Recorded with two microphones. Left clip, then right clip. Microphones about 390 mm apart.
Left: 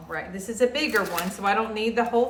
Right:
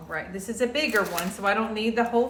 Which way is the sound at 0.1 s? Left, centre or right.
Centre.